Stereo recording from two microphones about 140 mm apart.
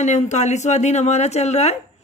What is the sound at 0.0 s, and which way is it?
Speech, 55° left (ahead or behind).